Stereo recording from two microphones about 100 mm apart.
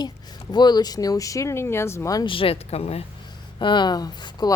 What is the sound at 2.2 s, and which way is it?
Speech, 65° left (ahead or behind).